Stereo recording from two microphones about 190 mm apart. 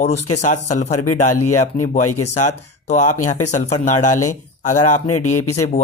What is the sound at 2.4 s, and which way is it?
Speech, 40° left (ahead or behind).